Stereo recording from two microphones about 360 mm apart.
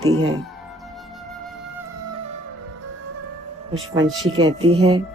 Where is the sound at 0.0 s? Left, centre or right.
Right.